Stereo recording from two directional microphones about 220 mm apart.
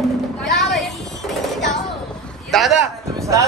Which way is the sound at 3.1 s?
15° right (ahead or behind).